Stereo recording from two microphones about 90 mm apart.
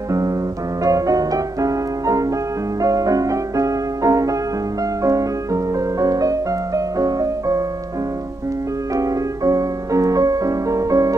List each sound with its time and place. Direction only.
0.8 s music: 40° right (ahead or behind)
8.9 s music: 40° right (ahead or behind)